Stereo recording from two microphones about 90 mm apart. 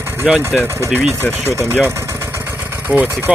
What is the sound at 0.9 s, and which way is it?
Speech, 25° left (ahead or behind).